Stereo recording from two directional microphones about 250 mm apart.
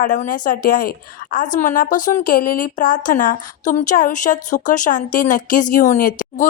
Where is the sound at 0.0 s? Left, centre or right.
Left.